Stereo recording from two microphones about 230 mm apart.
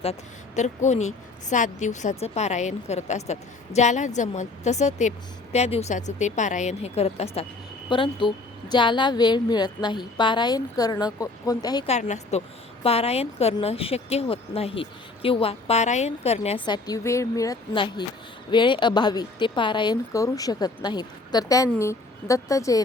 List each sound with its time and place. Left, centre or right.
0.0 s a woman's voice: left
11.9 s a woman's voice: left; by 22.8 s centre